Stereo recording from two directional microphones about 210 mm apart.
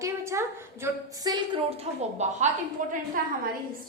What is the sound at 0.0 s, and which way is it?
A woman's voice, 10° right (ahead or behind).